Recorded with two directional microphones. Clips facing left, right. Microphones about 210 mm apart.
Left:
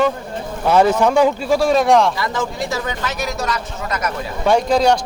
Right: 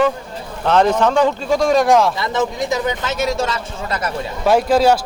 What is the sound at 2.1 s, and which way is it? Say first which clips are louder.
Speech: right 3 dB; 20° right (ahead or behind).